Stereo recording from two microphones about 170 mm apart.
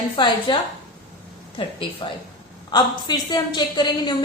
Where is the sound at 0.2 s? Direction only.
30° left (ahead or behind).